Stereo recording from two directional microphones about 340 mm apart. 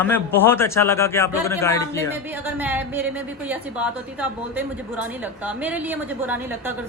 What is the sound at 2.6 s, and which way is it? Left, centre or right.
A woman's voice, centre.